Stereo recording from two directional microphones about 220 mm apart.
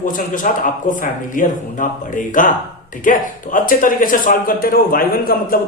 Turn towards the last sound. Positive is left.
turn(degrees=40)  # may be behind; listen again after turning